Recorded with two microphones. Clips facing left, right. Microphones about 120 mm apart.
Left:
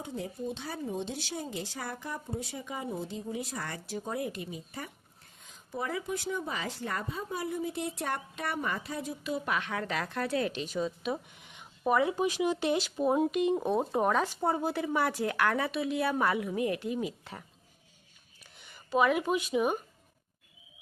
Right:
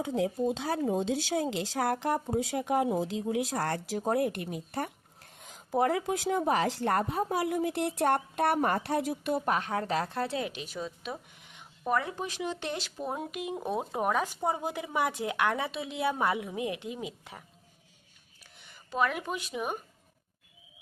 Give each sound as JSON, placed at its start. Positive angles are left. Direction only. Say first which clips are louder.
{"t": 0.1, "sound": "speech", "louder": "right 7 dB", "side_deg": -90}
{"t": 9.5, "sound": "a woman's voice", "louder": "right 3 dB", "side_deg": -40}
{"t": 10.4, "sound": "speech", "louder": "left 4 dB", "side_deg": -10}
{"t": 18.9, "sound": "speech", "louder": "left 4 dB", "side_deg": 5}